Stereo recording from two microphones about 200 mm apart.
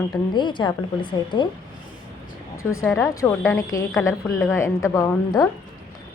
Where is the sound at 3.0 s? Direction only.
15° left (ahead or behind).